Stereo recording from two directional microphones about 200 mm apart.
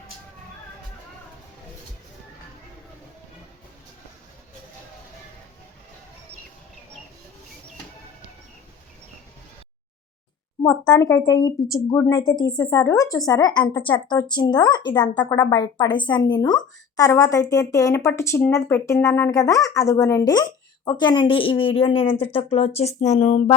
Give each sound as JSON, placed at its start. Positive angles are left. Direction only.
{"t": 10.6, "sound": "speech", "side_deg": 20}